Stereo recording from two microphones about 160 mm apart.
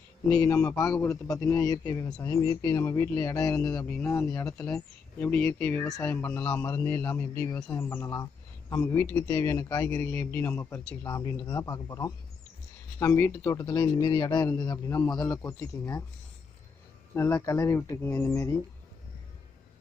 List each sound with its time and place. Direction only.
0.3 s a man's voice: 20° left (ahead or behind)
3.8 s speech: 10° left (ahead or behind)
5.2 s a man's voice: 5° left (ahead or behind); by 16.0 s 20° left (ahead or behind)
17.2 s speech: 20° left (ahead or behind)